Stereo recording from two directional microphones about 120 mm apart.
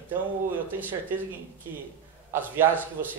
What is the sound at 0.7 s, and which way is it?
Speech, 15° right (ahead or behind).